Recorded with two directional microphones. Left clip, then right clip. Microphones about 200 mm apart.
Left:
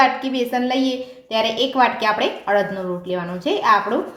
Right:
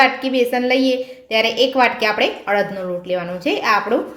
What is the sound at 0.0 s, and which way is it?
A woman's voice, 15° right (ahead or behind).